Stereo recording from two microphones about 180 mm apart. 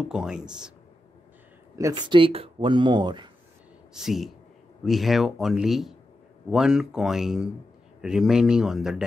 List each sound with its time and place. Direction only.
0.1 s speech: 5° right (ahead or behind)
1.8 s speech: 20° right (ahead or behind)
3.9 s speech: centre (ahead or behind)